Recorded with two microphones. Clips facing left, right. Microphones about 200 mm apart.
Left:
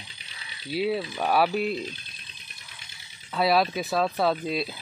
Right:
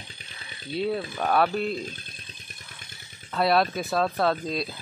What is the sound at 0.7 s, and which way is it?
Speech, 5° left (ahead or behind).